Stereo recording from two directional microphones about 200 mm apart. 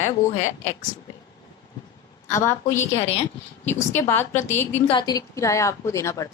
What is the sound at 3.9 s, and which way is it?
Speech, 10° left (ahead or behind).